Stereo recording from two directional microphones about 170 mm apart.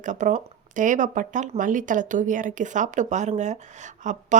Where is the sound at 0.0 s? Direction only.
45° right (ahead or behind).